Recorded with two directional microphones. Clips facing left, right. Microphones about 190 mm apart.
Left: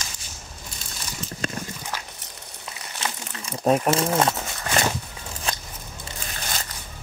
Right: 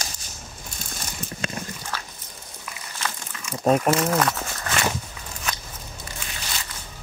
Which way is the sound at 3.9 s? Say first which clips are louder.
Even; 25° left (ahead or behind).